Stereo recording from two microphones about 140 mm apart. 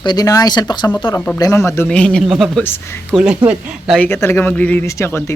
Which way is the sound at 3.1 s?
5° right (ahead or behind).